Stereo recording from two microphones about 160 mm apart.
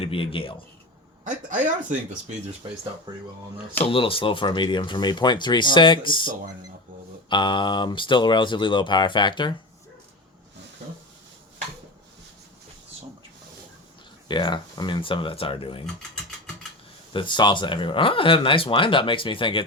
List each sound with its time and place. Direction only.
0.0 s speech: 35° left (ahead or behind)
1.2 s speech: 50° right (ahead or behind)
3.1 s speech: 30° right (ahead or behind)
3.8 s speech: 35° left (ahead or behind)
7.3 s speech: 30° left (ahead or behind)
14.3 s speech: 30° left (ahead or behind)
17.1 s speech: 30° left (ahead or behind)